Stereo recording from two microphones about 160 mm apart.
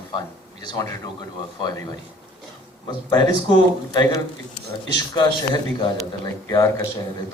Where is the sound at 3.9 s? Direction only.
25° left (ahead or behind).